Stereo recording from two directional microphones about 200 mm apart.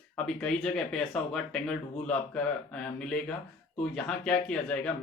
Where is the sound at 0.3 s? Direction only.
5° left (ahead or behind).